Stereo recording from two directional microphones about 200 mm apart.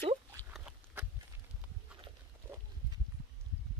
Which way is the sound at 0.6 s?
10° right (ahead or behind).